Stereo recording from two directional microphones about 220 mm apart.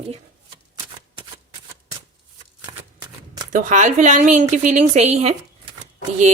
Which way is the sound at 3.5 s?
35° right (ahead or behind).